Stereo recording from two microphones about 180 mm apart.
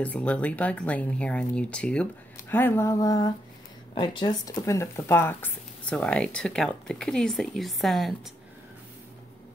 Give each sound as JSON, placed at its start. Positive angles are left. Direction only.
{"t": 0.0, "sound": "speech", "side_deg": 5}